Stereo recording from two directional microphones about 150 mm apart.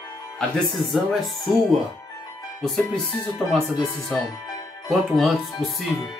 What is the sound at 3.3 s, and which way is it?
Music, centre (ahead or behind).